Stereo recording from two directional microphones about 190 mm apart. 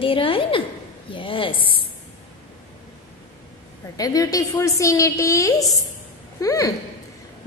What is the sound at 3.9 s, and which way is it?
A woman's voice, 20° left (ahead or behind).